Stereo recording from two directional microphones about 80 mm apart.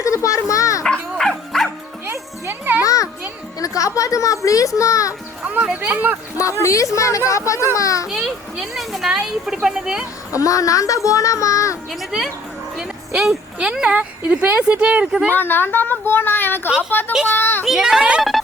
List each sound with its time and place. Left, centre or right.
0.0 s a sound: left
0.9 s dog: centre
2.0 s music: right
2.8 s music: left
3.6 s a child's voice: left
5.5 s speech: centre
6.3 s a child's voice: left
8.0 s speech: centre
10.3 s a child's voice: left
12.7 s speech: centre
15.4 s speech: left
17.7 s speech: centre
18.2 s music: centre